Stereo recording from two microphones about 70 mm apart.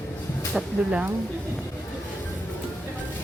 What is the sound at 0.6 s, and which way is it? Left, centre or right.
Speech, centre.